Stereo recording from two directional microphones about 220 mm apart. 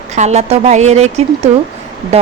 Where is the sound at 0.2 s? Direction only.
30° right (ahead or behind).